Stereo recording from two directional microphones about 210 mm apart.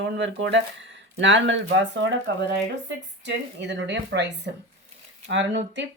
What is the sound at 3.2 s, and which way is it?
Speech, 55° right (ahead or behind).